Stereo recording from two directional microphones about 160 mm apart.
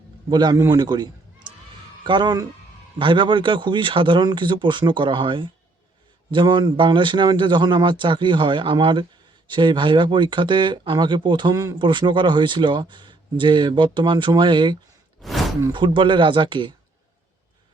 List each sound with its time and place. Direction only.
0.3 s a man's voice: 25° right (ahead or behind)
15.2 s a sound: centre (ahead or behind)
15.7 s a man's voice: 30° right (ahead or behind)